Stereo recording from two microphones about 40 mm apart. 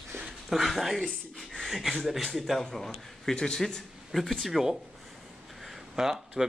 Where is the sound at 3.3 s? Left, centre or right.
Centre.